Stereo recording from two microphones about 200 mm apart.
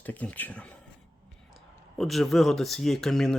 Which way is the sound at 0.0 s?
10° left (ahead or behind).